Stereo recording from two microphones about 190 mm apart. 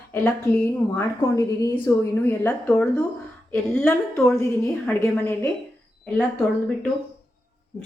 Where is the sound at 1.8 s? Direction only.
10° left (ahead or behind).